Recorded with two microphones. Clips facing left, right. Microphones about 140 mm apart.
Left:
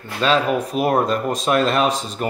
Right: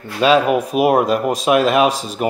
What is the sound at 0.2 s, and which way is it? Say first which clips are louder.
Speech: right 5 dB; 10° right (ahead or behind).